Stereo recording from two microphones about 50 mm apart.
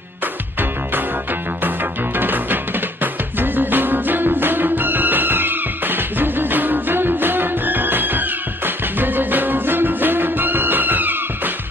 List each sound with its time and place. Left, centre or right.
2.1 s music: right